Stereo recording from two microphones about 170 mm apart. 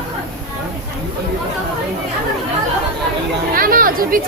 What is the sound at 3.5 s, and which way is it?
Speech, 55° right (ahead or behind).